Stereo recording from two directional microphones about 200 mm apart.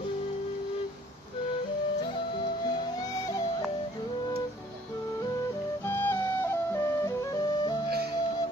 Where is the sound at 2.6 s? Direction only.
20° left (ahead or behind).